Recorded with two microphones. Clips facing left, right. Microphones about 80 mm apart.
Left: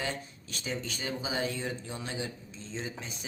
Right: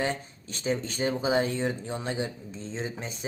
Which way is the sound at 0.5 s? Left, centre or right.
Right.